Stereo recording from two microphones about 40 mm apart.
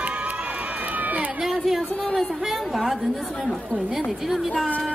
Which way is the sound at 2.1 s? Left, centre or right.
Centre.